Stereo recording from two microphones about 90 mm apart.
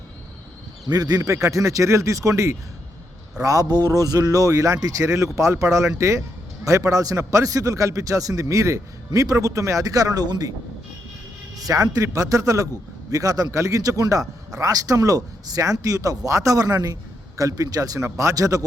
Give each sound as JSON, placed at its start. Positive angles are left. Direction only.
{"t": 0.9, "sound": "a man's voice", "side_deg": -45}
{"t": 11.5, "sound": "a man's voice", "side_deg": -40}